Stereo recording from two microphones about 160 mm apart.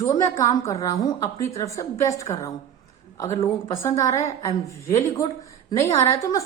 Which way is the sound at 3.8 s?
20° left (ahead or behind).